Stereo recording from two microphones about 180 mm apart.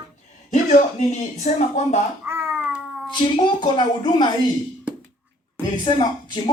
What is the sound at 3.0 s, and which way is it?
A woman's voice, 25° left (ahead or behind).